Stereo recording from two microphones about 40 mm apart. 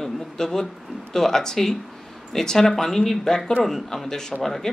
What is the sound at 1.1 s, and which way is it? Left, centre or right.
Speech, centre.